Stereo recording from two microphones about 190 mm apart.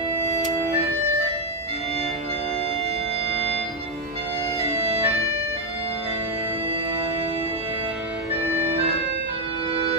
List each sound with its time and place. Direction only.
4.6 s organ: 30° right (ahead or behind)